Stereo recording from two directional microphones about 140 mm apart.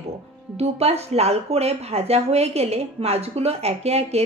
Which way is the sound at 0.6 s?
50° right (ahead or behind).